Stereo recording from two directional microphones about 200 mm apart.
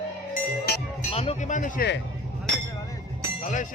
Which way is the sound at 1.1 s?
30° left (ahead or behind).